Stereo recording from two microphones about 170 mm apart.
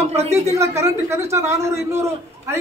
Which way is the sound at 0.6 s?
15° right (ahead or behind).